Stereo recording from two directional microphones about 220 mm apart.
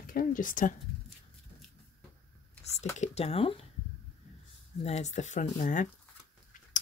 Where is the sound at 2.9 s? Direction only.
30° left (ahead or behind).